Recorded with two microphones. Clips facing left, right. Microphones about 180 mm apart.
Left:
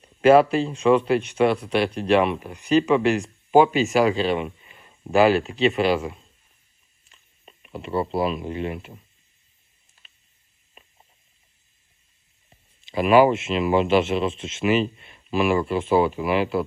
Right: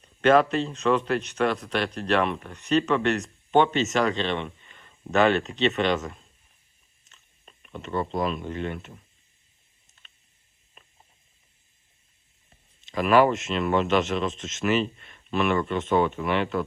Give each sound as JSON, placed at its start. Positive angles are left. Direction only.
{"t": 0.2, "sound": "speech", "side_deg": 5}
{"t": 7.7, "sound": "speech", "side_deg": 30}
{"t": 8.1, "sound": "speech", "side_deg": 5}
{"t": 12.9, "sound": "speech", "side_deg": 5}